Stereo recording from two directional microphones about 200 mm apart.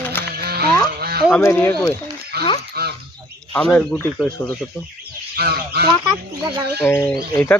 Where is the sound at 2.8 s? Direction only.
50° right (ahead or behind).